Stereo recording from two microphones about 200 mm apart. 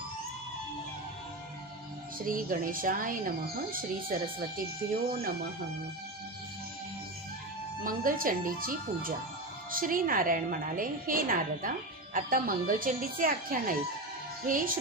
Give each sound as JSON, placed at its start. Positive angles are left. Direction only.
{"t": 2.1, "sound": "speech", "side_deg": -45}
{"t": 7.9, "sound": "speech", "side_deg": -45}